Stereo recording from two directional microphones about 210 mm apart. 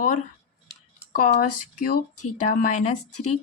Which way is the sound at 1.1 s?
40° left (ahead or behind).